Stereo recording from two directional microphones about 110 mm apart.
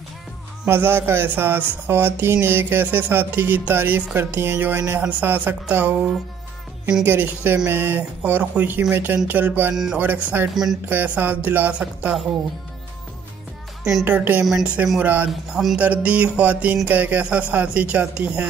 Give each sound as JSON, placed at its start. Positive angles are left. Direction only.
{"t": 0.7, "sound": "speech", "side_deg": -20}
{"t": 5.0, "sound": "music", "side_deg": -15}
{"t": 7.1, "sound": "speech", "side_deg": -20}
{"t": 8.9, "sound": "music", "side_deg": -20}
{"t": 10.5, "sound": "speech", "side_deg": -5}
{"t": 10.9, "sound": "music", "side_deg": -15}
{"t": 14.0, "sound": "music", "side_deg": -15}
{"t": 14.4, "sound": "speech", "side_deg": -5}
{"t": 15.0, "sound": "music", "side_deg": -15}